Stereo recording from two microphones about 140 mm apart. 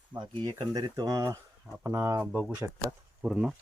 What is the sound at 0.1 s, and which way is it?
Speech, 30° right (ahead or behind).